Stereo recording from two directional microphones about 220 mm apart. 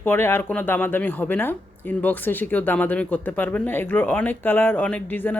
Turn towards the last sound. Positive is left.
turn(degrees=10)  # may be behind; listen again after turning